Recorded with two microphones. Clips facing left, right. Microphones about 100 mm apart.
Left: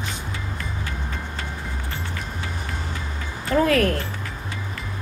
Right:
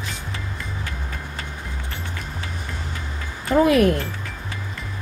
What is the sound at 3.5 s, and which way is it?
Speech, 20° right (ahead or behind).